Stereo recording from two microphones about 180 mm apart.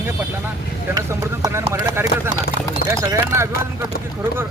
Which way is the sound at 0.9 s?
20° right (ahead or behind).